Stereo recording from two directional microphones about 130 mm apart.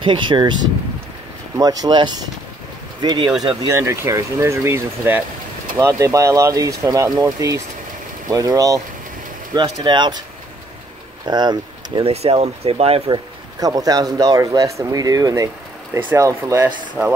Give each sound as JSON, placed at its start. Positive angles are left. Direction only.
{"t": 0.0, "sound": "speech", "side_deg": -40}
{"t": 1.6, "sound": "speech", "side_deg": -30}
{"t": 3.6, "sound": "speech", "side_deg": -20}
{"t": 11.2, "sound": "speech", "side_deg": -35}
{"t": 12.1, "sound": "speech", "side_deg": -50}
{"t": 13.1, "sound": "speech", "side_deg": -30}